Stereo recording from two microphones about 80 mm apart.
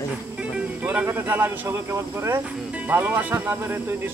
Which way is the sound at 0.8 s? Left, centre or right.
Right.